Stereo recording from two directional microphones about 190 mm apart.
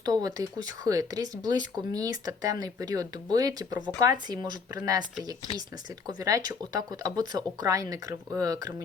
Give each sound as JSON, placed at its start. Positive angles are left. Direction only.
{"t": 0.0, "sound": "speech", "side_deg": -20}
{"t": 6.1, "sound": "speech", "side_deg": -20}